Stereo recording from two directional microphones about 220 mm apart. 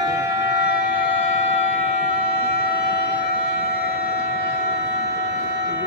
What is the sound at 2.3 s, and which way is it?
Shofar, 45° left (ahead or behind).